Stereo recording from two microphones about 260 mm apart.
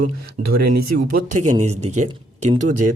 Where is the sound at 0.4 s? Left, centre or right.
Right.